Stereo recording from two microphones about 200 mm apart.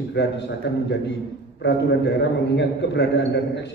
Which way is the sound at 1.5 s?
60° left (ahead or behind).